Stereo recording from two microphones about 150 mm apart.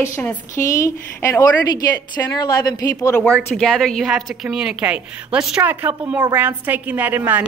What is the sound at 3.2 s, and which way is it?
A woman's voice, 5° left (ahead or behind).